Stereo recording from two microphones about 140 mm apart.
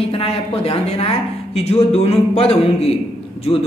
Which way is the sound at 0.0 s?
45° left (ahead or behind).